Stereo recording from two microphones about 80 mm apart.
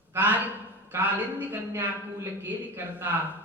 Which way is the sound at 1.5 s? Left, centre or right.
Right.